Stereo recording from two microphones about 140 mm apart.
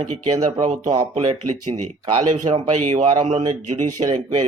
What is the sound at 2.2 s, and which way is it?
A man's voice, 60° right (ahead or behind).